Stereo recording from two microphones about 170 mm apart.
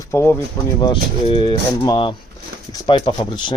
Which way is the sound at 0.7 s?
25° left (ahead or behind).